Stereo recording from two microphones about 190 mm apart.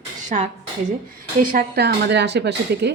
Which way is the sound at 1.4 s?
50° right (ahead or behind).